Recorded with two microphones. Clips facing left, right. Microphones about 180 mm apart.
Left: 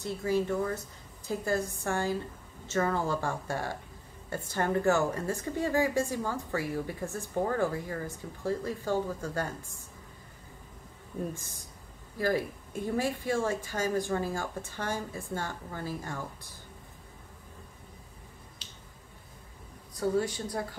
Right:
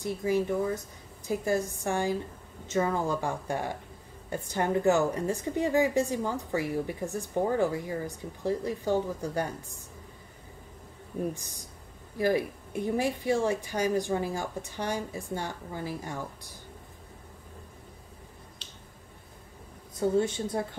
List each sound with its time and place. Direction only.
0.0 s a woman's voice: 15° right (ahead or behind)
12.2 s a woman's voice: 15° right (ahead or behind)
18.6 s finger snapping: centre (ahead or behind)
20.0 s a woman's voice: 25° right (ahead or behind)